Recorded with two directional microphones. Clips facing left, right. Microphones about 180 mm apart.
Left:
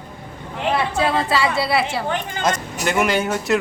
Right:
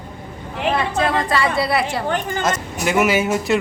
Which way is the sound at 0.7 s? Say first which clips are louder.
Even; 5° left (ahead or behind).